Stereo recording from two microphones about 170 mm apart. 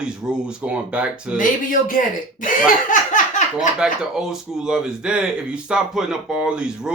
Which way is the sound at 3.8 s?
5° right (ahead or behind).